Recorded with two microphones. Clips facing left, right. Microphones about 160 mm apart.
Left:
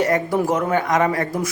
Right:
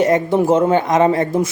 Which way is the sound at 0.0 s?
20° right (ahead or behind).